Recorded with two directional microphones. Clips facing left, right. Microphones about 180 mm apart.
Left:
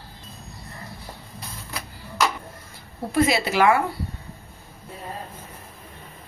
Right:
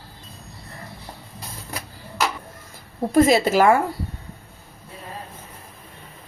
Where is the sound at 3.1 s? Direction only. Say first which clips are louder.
Right 5 dB; 45° right (ahead or behind).